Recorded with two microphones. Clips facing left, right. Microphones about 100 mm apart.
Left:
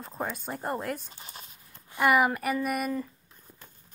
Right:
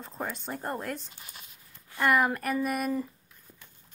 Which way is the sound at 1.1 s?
35° left (ahead or behind).